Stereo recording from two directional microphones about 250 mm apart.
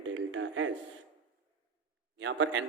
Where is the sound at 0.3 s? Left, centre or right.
Right.